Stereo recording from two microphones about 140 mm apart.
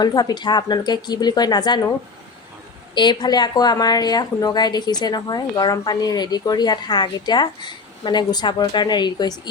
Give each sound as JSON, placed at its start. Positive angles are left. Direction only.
{"t": 0.0, "sound": "speech", "side_deg": 30}
{"t": 2.9, "sound": "speech", "side_deg": 30}